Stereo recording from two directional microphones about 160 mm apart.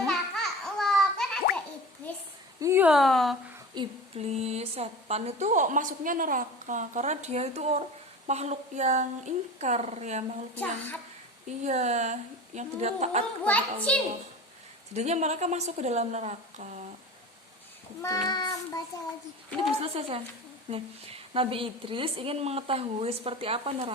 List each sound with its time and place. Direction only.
0.1 s a sound: centre (ahead or behind)
2.6 s a sound: 20° right (ahead or behind)
2.8 s speech: centre (ahead or behind)
3.8 s a sound: 25° right (ahead or behind)
4.2 s a woman's voice: 40° right (ahead or behind)
10.5 s a child's voice: 10° left (ahead or behind)
11.6 s a woman's voice: 45° right (ahead or behind)
13.4 s a child's voice: 10° left (ahead or behind)
14.9 s a woman's voice: 45° right (ahead or behind)
18.0 s child singing: 20° left (ahead or behind)
19.8 s a woman's voice: 35° right (ahead or behind)